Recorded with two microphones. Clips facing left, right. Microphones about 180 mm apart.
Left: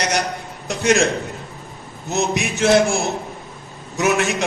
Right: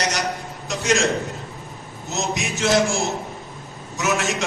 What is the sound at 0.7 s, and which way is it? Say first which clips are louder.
Speech: left 4 dB; 60° left (ahead or behind).